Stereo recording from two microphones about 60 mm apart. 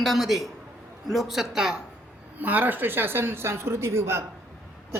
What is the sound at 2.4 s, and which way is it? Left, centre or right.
A woman's voice, right.